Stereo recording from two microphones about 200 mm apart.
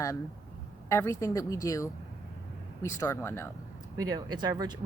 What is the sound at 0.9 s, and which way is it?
A woman's voice, 15° left (ahead or behind).